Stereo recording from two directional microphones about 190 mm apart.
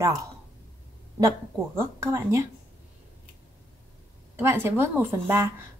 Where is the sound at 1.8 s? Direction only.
15° right (ahead or behind).